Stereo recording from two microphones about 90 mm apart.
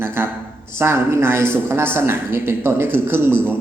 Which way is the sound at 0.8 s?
30° right (ahead or behind).